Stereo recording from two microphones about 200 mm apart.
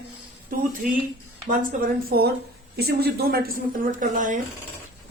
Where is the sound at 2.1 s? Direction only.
50° right (ahead or behind).